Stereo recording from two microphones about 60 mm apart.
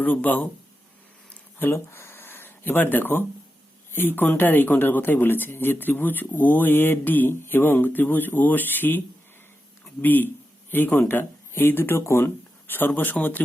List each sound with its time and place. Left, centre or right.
0.0 s speech: left
1.7 s speech: left